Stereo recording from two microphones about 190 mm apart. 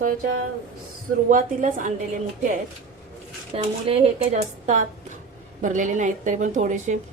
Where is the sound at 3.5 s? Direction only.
30° right (ahead or behind).